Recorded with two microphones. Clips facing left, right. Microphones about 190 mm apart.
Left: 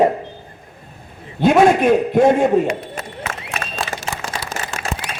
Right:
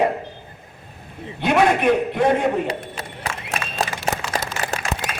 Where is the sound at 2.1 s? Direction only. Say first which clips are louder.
Left 5 dB; 45° left (ahead or behind).